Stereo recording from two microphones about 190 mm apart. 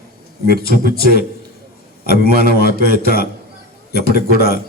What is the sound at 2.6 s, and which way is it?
A man's voice, 55° left (ahead or behind).